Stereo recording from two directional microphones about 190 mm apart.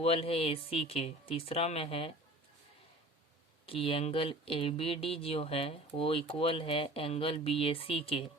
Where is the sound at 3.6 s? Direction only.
30° left (ahead or behind).